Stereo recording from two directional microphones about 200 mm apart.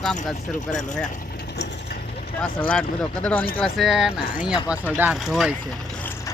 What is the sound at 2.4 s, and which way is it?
Speech, 5° left (ahead or behind).